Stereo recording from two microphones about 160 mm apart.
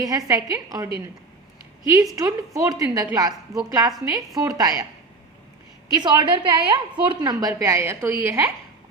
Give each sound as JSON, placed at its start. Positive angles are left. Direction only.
{"t": 0.0, "sound": "a woman's voice", "side_deg": -20}
{"t": 2.1, "sound": "a woman's voice", "side_deg": -20}
{"t": 5.9, "sound": "a woman's voice", "side_deg": -25}